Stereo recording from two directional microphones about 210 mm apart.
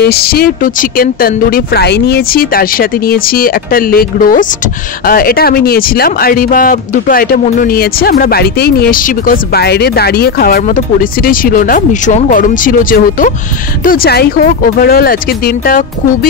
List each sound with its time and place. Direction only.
0.0 s speech: 45° left (ahead or behind)